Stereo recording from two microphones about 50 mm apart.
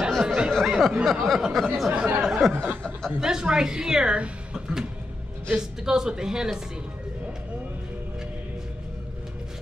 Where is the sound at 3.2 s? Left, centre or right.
Centre.